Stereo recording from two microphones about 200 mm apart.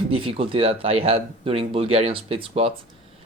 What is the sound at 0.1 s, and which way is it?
Speech, 25° right (ahead or behind).